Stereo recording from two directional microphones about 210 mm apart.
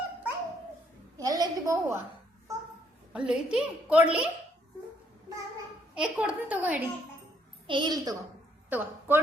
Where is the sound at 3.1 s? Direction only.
5° right (ahead or behind).